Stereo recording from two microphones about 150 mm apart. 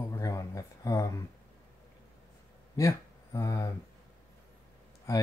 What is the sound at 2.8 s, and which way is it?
Speech, 20° left (ahead or behind).